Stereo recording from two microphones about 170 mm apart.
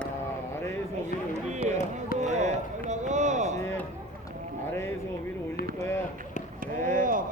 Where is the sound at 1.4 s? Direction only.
45° right (ahead or behind).